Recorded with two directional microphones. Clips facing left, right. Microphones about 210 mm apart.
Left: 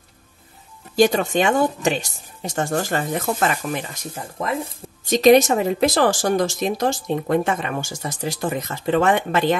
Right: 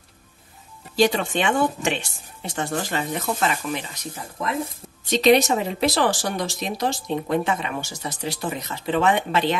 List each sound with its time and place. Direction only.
0.9 s speech: 45° left (ahead or behind)